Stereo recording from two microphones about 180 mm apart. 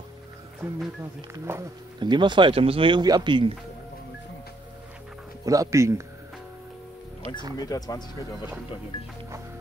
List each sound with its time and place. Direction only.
1.5 s speech: 15° right (ahead or behind)
2.0 s speech: 25° right (ahead or behind)
5.4 s speech: 20° right (ahead or behind)
7.5 s speech: 20° left (ahead or behind)